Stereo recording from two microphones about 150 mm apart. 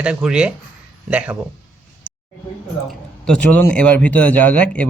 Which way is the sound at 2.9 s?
5° left (ahead or behind).